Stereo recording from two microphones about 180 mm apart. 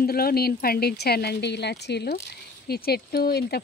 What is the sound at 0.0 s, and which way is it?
Speech, 55° left (ahead or behind).